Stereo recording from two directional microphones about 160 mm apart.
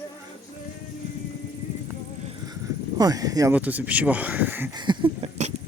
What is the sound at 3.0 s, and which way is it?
Speech, 25° right (ahead or behind).